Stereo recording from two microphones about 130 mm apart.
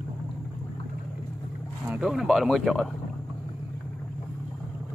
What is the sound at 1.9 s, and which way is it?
Speech, 5° right (ahead or behind).